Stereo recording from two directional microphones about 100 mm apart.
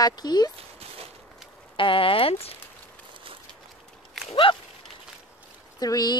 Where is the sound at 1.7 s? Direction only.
60° left (ahead or behind); by 2.5 s 75° left (ahead or behind).